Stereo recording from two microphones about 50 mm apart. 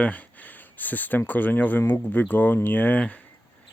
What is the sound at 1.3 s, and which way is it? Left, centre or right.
Speech, left.